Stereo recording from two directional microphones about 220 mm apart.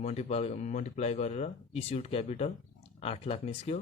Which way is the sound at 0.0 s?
30° left (ahead or behind).